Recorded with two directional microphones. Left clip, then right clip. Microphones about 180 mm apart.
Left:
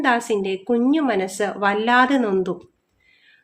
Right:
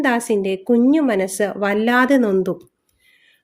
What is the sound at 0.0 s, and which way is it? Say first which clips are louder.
A woman's voice: right 1 dB; 45° right (ahead or behind).